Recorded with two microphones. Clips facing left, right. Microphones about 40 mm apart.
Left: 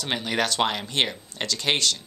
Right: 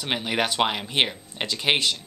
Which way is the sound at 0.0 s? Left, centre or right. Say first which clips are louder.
Even; centre.